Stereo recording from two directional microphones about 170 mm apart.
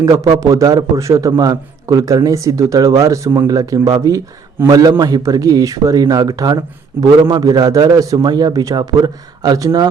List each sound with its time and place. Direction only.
0.3 s speech: 20° right (ahead or behind)